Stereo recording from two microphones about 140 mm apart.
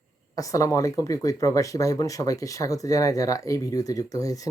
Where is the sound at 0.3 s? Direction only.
25° left (ahead or behind).